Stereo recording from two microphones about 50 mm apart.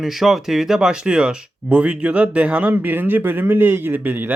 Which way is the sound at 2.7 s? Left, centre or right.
Right.